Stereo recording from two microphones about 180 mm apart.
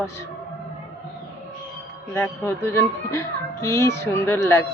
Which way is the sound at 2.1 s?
10° left (ahead or behind).